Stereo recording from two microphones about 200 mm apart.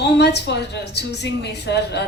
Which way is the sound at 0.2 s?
55° left (ahead or behind).